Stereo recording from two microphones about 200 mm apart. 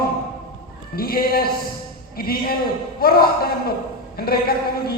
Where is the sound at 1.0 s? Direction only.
50° left (ahead or behind).